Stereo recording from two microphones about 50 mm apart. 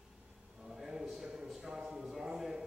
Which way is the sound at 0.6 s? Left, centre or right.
Centre.